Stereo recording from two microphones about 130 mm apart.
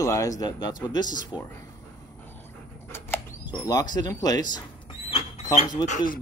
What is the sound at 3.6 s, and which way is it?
Speech, 30° left (ahead or behind).